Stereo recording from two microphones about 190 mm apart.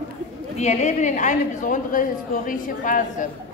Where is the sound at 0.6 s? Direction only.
35° left (ahead or behind).